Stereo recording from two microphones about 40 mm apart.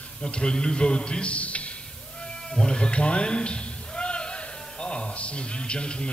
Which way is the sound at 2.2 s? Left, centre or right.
Left.